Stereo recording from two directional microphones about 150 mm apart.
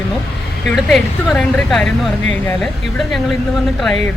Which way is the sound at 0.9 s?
Centre (ahead or behind).